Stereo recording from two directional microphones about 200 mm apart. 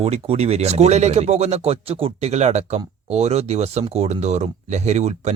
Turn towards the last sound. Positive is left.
turn(degrees=-35)  # may be behind; listen again after turning